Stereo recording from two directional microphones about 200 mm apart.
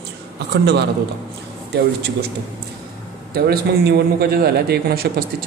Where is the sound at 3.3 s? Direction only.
50° right (ahead or behind).